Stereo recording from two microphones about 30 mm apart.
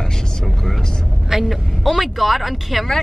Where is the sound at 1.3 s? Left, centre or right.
Centre.